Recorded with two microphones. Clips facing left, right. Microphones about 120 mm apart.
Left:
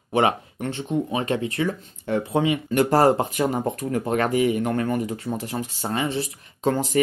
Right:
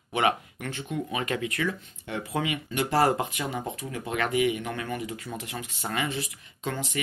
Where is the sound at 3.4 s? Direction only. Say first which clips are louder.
Left 9 dB; 50° left (ahead or behind).